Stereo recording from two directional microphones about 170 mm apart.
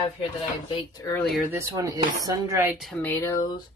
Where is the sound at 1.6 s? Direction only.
20° right (ahead or behind).